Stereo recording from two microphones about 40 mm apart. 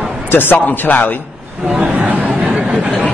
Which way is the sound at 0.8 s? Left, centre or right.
Left.